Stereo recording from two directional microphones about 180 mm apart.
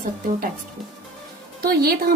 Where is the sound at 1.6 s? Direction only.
55° right (ahead or behind).